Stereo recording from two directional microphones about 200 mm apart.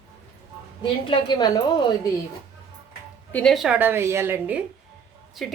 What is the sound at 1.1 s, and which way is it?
Speech, 20° left (ahead or behind).